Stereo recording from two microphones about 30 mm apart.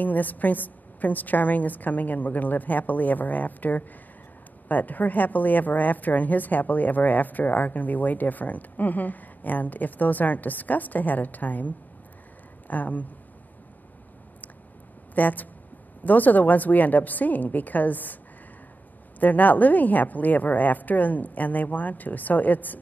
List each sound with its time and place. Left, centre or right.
0.0 s a woman's voice: left
15.1 s a woman's voice: left
19.1 s a woman's voice: left